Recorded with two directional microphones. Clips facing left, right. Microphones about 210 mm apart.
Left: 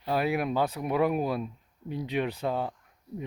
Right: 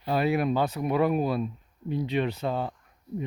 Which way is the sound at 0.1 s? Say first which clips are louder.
Right 3 dB; 10° left (ahead or behind).